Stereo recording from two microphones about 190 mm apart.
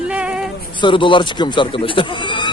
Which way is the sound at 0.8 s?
25° left (ahead or behind).